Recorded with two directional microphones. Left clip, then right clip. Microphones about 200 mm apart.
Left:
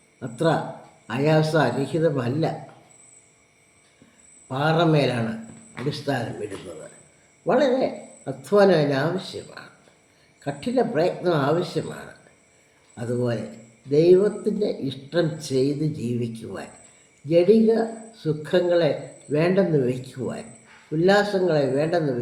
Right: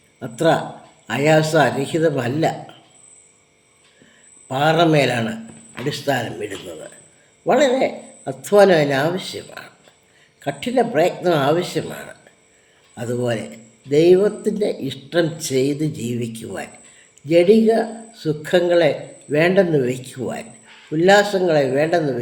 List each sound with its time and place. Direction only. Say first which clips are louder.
0.2 s speech: right 5 dB; 10° right (ahead or behind)
4.4 s speech: right 5 dB; 10° right (ahead or behind)